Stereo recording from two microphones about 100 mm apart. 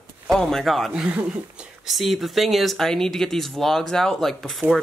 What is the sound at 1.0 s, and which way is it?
Speech, 10° right (ahead or behind).